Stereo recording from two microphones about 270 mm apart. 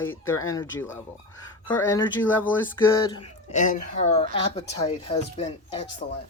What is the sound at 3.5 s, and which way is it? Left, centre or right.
Speech, left.